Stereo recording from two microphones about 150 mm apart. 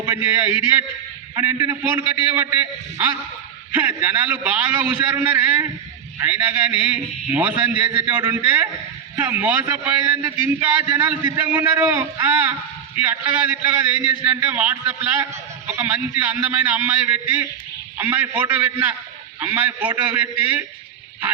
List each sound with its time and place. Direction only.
0.0 s a man's voice: 15° right (ahead or behind)